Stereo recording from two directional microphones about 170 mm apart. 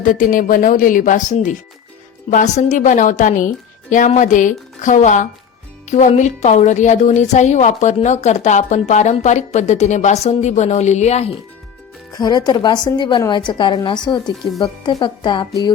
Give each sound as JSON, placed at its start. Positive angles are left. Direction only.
{"t": 0.0, "sound": "a woman's voice", "side_deg": 55}
{"t": 12.1, "sound": "a woman's voice", "side_deg": 25}